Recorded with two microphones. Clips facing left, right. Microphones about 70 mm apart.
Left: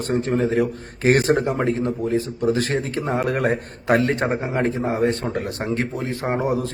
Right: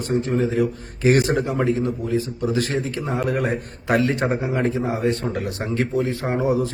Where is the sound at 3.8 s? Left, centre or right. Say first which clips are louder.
Left 1 dB; left.